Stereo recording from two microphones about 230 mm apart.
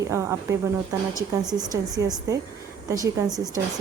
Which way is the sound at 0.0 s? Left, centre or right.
Centre.